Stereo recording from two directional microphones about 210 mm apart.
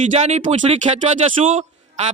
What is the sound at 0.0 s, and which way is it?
A man's voice, 35° right (ahead or behind).